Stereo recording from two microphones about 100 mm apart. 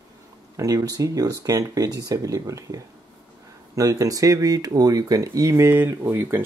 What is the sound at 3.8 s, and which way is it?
Speech, 35° right (ahead or behind).